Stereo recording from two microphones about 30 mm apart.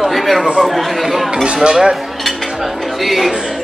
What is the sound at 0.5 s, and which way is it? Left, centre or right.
Speech, centre.